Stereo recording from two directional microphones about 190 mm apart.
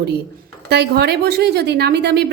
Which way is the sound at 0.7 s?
60° right (ahead or behind).